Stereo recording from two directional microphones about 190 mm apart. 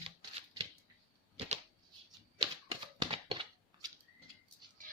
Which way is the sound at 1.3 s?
35° right (ahead or behind).